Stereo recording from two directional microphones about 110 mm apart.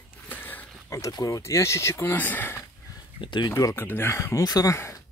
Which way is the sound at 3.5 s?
30° left (ahead or behind).